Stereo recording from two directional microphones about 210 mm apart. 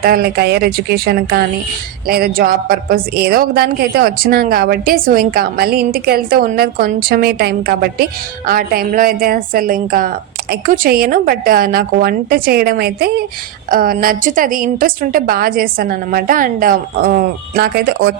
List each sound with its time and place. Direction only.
0.0 s a woman's voice: 45° right (ahead or behind)